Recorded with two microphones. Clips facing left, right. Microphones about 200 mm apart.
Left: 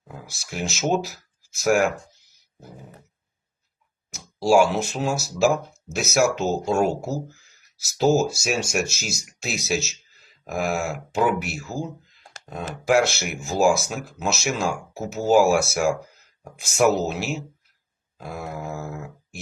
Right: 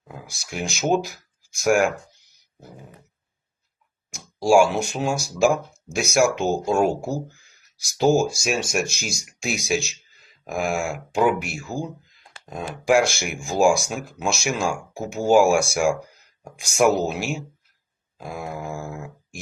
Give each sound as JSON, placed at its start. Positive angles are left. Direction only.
{"t": 0.4, "sound": "speech", "side_deg": 0}
{"t": 4.1, "sound": "speech", "side_deg": 5}
{"t": 12.5, "sound": "speech", "side_deg": -10}
{"t": 12.8, "sound": "speech", "side_deg": 0}